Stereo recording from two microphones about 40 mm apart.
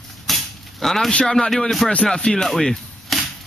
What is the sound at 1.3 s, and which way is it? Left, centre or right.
Speech, centre.